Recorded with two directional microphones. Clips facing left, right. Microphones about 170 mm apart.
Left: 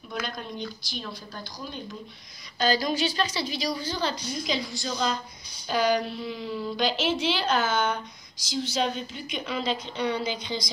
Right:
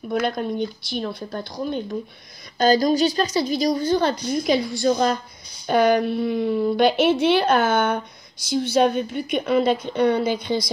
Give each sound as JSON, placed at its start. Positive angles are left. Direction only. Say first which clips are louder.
{"t": 0.1, "sound": "a woman's voice", "louder": "right 11 dB", "side_deg": -55}
{"t": 2.6, "sound": "a woman's voice", "louder": "right 8 dB", "side_deg": -40}